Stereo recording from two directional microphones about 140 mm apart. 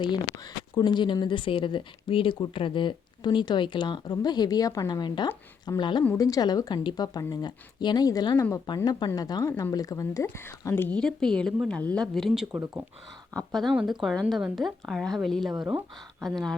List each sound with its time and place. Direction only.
0.8 s speech: 35° left (ahead or behind); by 15.5 s centre (ahead or behind)
15.5 s speech: 30° right (ahead or behind)
16.2 s speech: 5° left (ahead or behind)